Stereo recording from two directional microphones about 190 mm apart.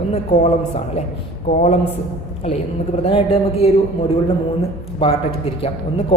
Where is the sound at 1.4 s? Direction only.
35° left (ahead or behind).